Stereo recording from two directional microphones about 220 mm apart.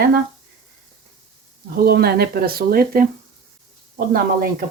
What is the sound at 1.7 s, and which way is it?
Speech, 45° right (ahead or behind).